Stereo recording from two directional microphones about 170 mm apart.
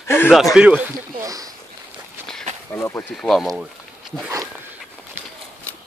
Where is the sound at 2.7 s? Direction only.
15° left (ahead or behind).